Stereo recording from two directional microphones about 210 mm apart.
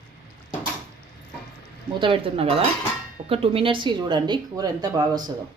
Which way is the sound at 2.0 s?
25° right (ahead or behind).